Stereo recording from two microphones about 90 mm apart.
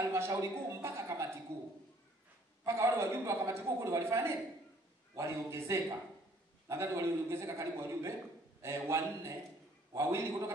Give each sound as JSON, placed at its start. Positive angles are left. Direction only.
{"t": 0.1, "sound": "speech", "side_deg": -35}
{"t": 0.7, "sound": "a sound", "side_deg": -30}
{"t": 2.6, "sound": "a man's voice", "side_deg": -30}